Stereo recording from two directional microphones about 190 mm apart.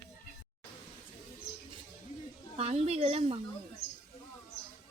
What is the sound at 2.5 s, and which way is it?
Speech, 30° right (ahead or behind).